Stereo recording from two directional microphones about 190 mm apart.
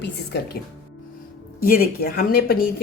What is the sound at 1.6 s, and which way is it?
Speech, 50° left (ahead or behind).